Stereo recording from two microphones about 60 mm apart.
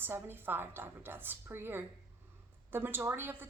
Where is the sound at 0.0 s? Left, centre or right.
Right.